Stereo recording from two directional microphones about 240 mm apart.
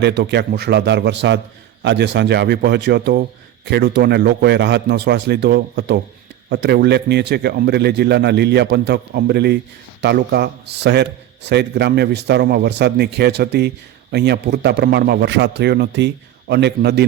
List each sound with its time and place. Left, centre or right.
0.0 s a man's voice: right